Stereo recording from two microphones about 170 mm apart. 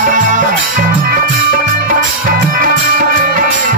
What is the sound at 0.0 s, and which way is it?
Music, 50° right (ahead or behind).